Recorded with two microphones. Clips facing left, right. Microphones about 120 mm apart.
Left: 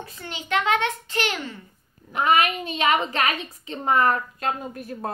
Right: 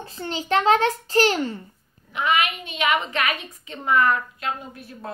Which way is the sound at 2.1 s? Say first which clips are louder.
Left 2 dB; 40° left (ahead or behind).